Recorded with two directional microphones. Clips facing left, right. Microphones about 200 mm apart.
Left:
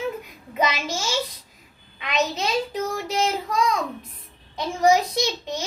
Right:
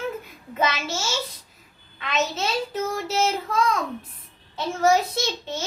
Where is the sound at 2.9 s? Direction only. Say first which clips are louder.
Right 1 dB; 15° left (ahead or behind).